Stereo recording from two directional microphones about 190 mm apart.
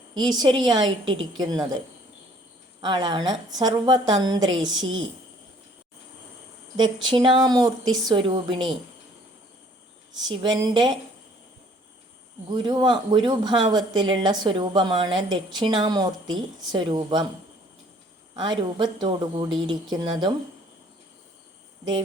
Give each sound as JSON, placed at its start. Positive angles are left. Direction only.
{"t": 0.1, "sound": "speech", "side_deg": -20}
{"t": 2.8, "sound": "speech", "side_deg": -25}
{"t": 6.7, "sound": "speech", "side_deg": -25}
{"t": 10.2, "sound": "speech", "side_deg": -20}
{"t": 12.5, "sound": "speech", "side_deg": -25}
{"t": 18.3, "sound": "speech", "side_deg": -25}